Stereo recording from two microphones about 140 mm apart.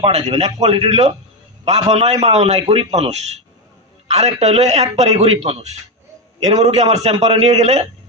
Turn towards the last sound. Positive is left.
turn(degrees=-50)  # may be behind; listen again after turning